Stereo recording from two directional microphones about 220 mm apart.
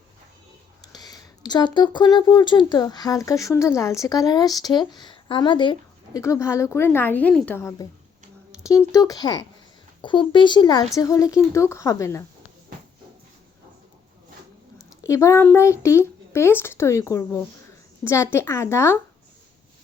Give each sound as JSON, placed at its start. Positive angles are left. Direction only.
{"t": 0.9, "sound": "speech", "side_deg": 20}
{"t": 14.8, "sound": "speech", "side_deg": 15}